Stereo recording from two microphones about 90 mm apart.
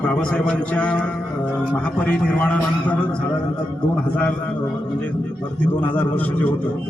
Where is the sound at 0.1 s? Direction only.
10° left (ahead or behind).